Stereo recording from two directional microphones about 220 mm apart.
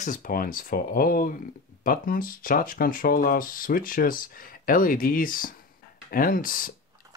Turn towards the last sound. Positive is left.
turn(degrees=40)  # may be behind; listen again after turning